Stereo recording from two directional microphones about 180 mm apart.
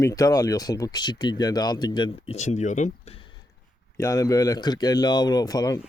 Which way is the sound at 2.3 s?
40° left (ahead or behind).